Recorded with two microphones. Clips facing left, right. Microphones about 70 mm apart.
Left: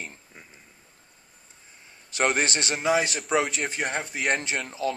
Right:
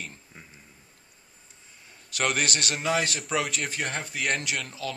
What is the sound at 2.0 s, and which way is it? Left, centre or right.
Speech, left.